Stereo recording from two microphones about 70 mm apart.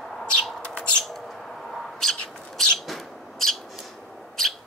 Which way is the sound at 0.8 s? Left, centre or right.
Centre.